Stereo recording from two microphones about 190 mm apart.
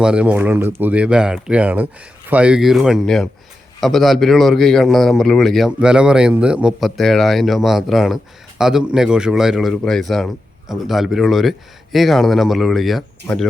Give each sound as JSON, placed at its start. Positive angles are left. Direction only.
{"t": 0.0, "sound": "a man's voice", "side_deg": -5}